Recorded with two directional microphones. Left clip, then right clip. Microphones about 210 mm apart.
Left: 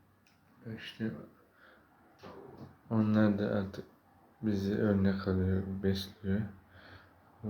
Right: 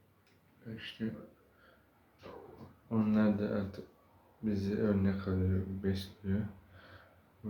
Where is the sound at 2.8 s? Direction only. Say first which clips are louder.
Left 2 dB; 15° left (ahead or behind).